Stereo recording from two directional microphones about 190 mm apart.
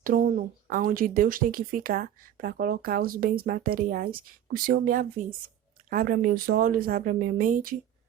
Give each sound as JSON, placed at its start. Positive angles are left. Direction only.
{"t": 0.0, "sound": "speech", "side_deg": -45}